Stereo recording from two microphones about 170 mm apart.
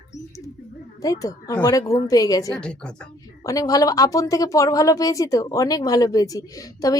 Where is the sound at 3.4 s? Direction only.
20° left (ahead or behind).